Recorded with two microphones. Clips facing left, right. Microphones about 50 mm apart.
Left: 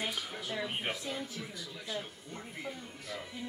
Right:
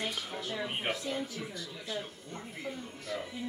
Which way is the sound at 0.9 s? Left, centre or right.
Centre.